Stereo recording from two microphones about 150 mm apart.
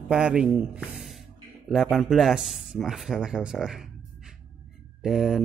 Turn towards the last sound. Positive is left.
turn(degrees=-5)  # may be behind; listen again after turning